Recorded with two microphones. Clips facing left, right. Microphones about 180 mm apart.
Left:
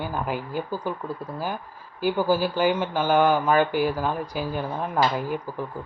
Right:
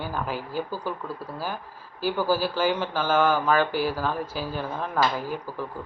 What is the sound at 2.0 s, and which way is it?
Speech, 15° left (ahead or behind).